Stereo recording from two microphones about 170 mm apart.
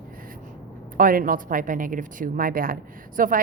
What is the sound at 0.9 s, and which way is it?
A woman's voice, 55° right (ahead or behind).